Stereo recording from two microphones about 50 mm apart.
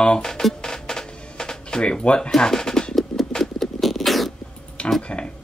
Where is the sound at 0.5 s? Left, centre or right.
Centre.